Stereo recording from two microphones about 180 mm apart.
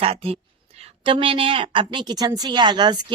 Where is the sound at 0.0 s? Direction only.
30° right (ahead or behind).